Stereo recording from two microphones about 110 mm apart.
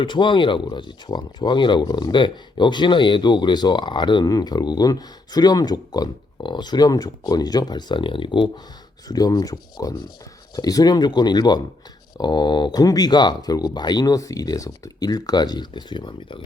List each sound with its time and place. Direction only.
0.0 s speech: 50° left (ahead or behind)
9.0 s speech: 35° left (ahead or behind)